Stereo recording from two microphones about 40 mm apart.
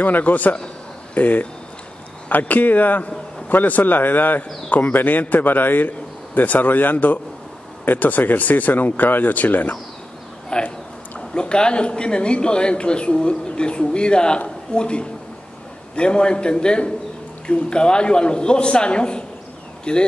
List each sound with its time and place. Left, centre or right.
0.0 s a man's voice: left
10.5 s a man's voice: left